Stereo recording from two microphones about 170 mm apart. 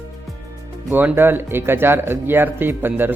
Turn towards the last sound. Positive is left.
turn(degrees=-10)  # may be behind; listen again after turning